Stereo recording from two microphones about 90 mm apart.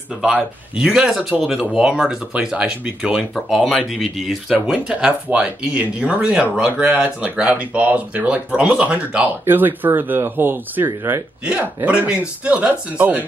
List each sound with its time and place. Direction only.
0.2 s speech: 10° right (ahead or behind)
3.3 s speech: centre (ahead or behind); by 10.9 s 25° right (ahead or behind)
11.4 s speech: 15° right (ahead or behind)